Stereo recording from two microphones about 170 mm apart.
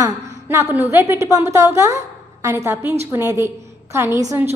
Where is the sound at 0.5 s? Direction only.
15° right (ahead or behind).